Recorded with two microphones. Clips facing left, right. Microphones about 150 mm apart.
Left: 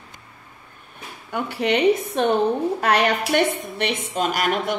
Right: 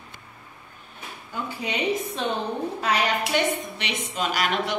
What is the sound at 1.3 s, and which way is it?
A woman's voice, 70° left (ahead or behind).